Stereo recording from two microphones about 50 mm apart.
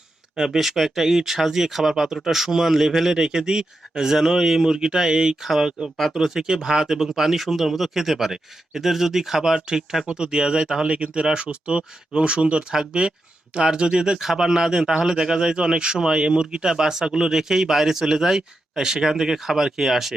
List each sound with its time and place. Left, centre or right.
0.3 s speech: centre